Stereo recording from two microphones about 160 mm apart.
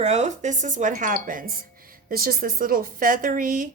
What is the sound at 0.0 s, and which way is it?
Speech, 45° right (ahead or behind).